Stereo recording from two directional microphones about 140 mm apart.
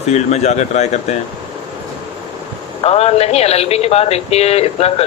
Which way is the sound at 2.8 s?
50° left (ahead or behind).